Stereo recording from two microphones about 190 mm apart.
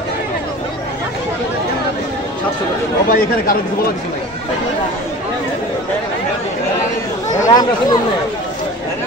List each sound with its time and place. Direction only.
3.1 s speech: 50° left (ahead or behind)
7.3 s speech: 20° left (ahead or behind)